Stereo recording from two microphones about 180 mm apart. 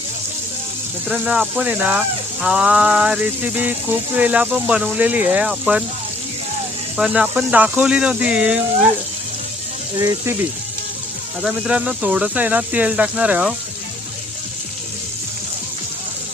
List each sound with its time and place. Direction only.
1.0 s speech: 5° right (ahead or behind)
6.9 s speech: 5° right (ahead or behind)
10.0 s speech: 15° right (ahead or behind)
11.4 s speech: 5° right (ahead or behind)